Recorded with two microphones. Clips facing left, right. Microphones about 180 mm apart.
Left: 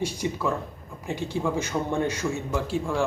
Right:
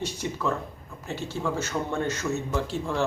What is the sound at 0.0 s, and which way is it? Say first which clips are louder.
Speech: left 2 dB; 10° left (ahead or behind).